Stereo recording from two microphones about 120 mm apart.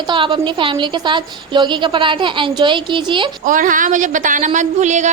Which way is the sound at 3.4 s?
90° right.